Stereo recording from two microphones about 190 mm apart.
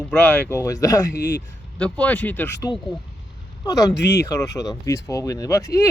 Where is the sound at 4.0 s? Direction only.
60° left (ahead or behind).